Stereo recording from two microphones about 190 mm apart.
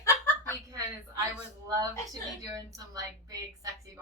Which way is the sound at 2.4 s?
15° right (ahead or behind).